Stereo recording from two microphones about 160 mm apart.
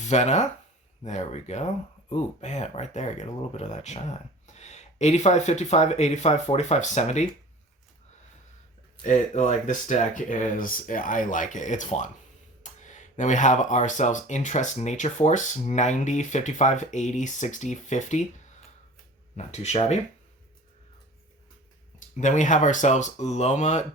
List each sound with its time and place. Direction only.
0.0 s speech: 45° left (ahead or behind)
9.0 s speech: 45° left (ahead or behind)
19.4 s speech: 45° left (ahead or behind)
21.9 s speech: 50° left (ahead or behind)